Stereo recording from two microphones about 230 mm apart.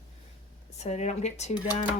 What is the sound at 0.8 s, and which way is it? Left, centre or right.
Speech, left.